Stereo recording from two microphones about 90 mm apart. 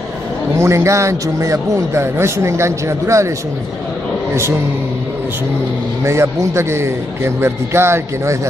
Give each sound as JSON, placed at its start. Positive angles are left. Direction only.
{"t": 0.6, "sound": "speech", "side_deg": -35}
{"t": 6.0, "sound": "speech", "side_deg": -30}